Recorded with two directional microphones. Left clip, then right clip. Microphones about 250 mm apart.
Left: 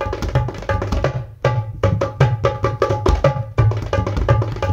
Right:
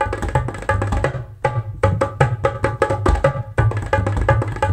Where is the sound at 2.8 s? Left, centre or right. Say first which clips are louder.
Even; centre.